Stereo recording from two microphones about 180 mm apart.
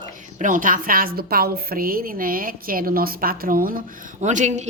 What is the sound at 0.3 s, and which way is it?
A woman's voice, 45° right (ahead or behind).